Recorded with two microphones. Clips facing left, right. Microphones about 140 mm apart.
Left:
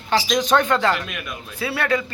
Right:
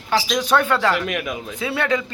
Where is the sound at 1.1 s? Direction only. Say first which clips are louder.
Right 7 dB; 85° right.